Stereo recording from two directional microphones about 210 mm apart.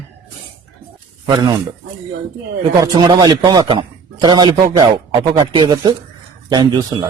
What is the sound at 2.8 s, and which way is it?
A man's voice, 20° right (ahead or behind).